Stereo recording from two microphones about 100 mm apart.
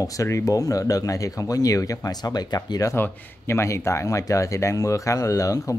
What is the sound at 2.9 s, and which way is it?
Speech, 25° left (ahead or behind).